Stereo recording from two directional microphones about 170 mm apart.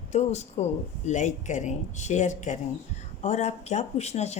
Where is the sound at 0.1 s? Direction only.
40° left (ahead or behind).